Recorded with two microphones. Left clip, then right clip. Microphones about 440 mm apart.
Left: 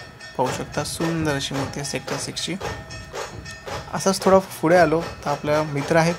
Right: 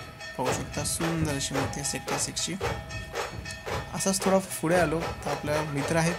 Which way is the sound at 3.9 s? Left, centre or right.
Right.